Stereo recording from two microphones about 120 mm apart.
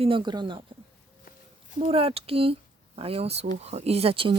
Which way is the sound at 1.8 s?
55° right (ahead or behind).